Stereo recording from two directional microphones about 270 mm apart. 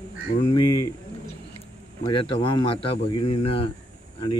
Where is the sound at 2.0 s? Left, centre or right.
Centre.